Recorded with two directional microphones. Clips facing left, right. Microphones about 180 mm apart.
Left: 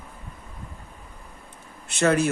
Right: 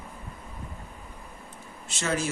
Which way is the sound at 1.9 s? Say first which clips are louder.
Left 8 dB; 60° left (ahead or behind).